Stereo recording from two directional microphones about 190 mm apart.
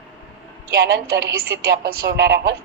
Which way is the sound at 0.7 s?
55° right (ahead or behind).